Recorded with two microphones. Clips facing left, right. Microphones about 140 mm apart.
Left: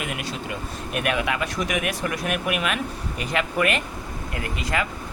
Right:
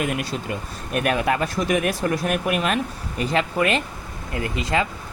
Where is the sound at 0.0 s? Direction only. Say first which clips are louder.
Right 5 dB; 40° right (ahead or behind).